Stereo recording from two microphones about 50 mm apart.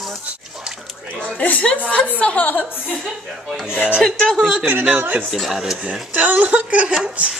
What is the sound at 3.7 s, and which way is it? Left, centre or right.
Speech, right.